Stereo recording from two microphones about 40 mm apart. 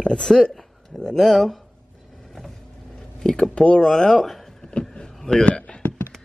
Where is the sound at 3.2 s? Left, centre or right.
Centre.